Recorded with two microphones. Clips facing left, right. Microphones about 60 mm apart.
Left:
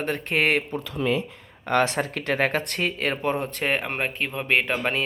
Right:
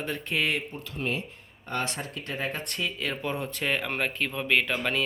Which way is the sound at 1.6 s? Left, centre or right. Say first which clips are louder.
Left 10 dB; left.